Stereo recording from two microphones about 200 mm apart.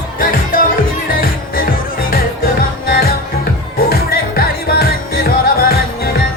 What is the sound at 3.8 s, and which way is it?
Music, 50° left (ahead or behind).